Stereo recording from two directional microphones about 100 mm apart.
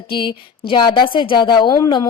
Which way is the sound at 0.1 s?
50° left (ahead or behind).